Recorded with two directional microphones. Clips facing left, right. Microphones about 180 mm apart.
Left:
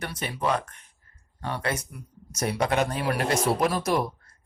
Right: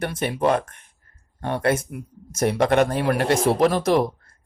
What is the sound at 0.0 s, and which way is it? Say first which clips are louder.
Speech: right 7 dB; 50° right (ahead or behind).